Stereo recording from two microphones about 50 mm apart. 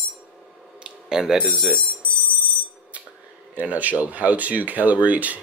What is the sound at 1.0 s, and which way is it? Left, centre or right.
Speech, centre.